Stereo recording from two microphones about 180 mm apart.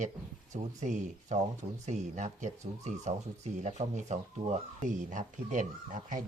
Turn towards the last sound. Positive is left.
turn(degrees=-45)  # may be behind; listen again after turning